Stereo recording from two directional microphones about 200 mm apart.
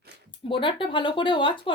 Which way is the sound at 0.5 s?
25° left (ahead or behind).